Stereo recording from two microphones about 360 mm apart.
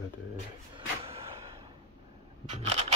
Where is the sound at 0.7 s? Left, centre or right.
Centre.